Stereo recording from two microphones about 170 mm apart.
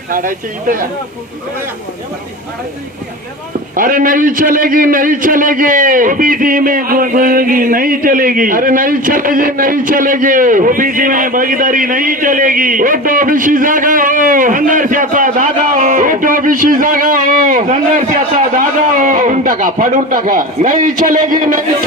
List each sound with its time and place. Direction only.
0.1 s speech: 55° right (ahead or behind)
3.8 s a man's voice: 55° right (ahead or behind)